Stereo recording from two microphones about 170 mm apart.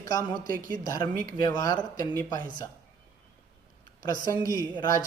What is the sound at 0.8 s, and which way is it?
Speech, 20° left (ahead or behind).